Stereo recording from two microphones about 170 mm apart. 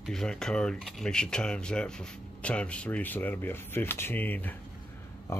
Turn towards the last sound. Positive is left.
turn(degrees=15)  # may be behind; listen again after turning